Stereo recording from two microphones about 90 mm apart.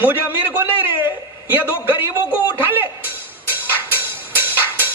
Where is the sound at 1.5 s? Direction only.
20° right (ahead or behind).